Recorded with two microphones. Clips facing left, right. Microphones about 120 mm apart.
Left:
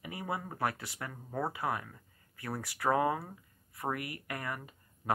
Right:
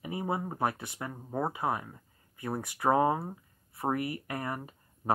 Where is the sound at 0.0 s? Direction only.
25° right (ahead or behind).